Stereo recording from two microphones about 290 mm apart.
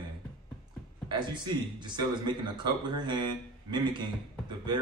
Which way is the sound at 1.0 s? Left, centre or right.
Centre.